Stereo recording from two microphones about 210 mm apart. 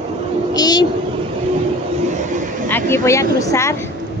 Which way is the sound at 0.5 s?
20° left (ahead or behind).